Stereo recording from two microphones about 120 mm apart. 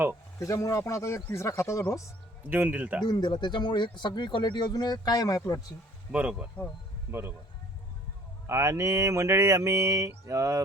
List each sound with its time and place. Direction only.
0.3 s speech: 25° left (ahead or behind)
2.5 s speech: 15° right (ahead or behind)
3.0 s speech: 40° left (ahead or behind)
6.1 s speech: 10° right (ahead or behind)
7.1 s a sound: 20° right (ahead or behind)
8.4 s a sound: 25° right (ahead or behind)